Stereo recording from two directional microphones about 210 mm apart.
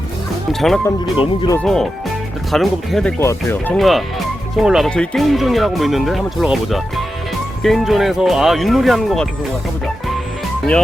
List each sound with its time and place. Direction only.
1.1 s speech: 25° left (ahead or behind)
1.5 s speech: centre (ahead or behind)